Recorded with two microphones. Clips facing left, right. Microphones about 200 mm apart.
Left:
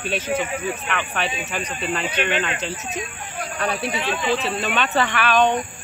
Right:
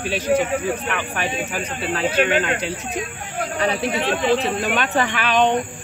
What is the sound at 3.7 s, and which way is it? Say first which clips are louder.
Speech: right 2 dB; 60° right (ahead or behind).